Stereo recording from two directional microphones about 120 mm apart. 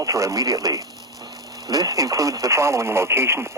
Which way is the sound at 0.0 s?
25° right (ahead or behind).